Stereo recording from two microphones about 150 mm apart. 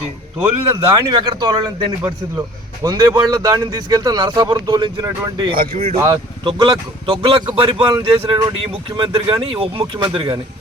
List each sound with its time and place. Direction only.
0.9 s speech: 30° right (ahead or behind)
5.5 s speech: 65° right (ahead or behind)
6.1 s speech: 30° right (ahead or behind)